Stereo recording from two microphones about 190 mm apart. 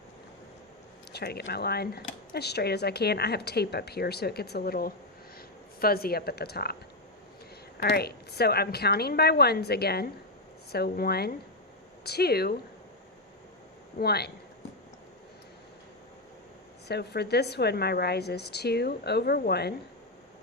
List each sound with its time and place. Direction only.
1.1 s speech: 60° left (ahead or behind)
7.8 s speech: 55° left (ahead or behind)
14.0 s speech: 55° left (ahead or behind)
16.9 s speech: 60° left (ahead or behind)